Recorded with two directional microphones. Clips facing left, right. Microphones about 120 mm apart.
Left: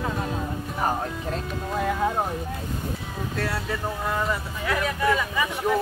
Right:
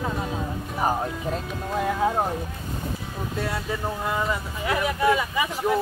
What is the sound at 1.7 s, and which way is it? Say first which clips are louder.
Speech: right 1 dB; 5° right (ahead or behind).